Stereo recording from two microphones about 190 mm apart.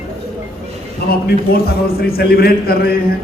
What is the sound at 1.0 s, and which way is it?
A man's voice, 55° left (ahead or behind).